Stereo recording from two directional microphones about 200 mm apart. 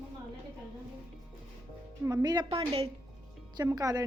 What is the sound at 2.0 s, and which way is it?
A woman's voice, 20° right (ahead or behind).